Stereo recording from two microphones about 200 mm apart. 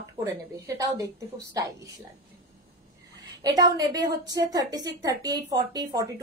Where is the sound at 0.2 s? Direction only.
15° right (ahead or behind).